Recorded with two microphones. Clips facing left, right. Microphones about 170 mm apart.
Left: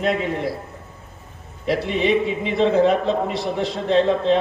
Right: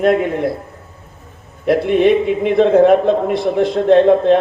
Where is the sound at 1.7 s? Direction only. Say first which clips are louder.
Right 7 dB; 55° right (ahead or behind).